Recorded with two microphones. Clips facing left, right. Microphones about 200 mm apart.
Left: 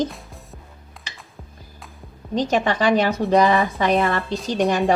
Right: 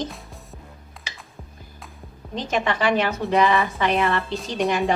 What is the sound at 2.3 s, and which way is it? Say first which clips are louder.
Speech: left 4 dB; 40° left (ahead or behind).